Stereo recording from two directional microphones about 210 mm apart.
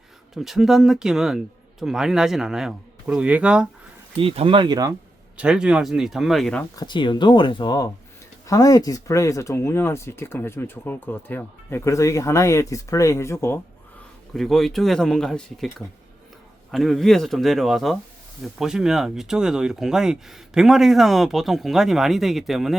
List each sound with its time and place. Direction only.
0.3 s speech: centre (ahead or behind)
4.2 s speech: 25° right (ahead or behind)
5.4 s speech: 5° right (ahead or behind)
6.7 s speech: 20° left (ahead or behind)
14.3 s speech: centre (ahead or behind)
16.7 s speech: centre (ahead or behind)